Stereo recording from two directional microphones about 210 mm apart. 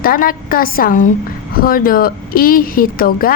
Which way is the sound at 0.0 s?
45° left (ahead or behind).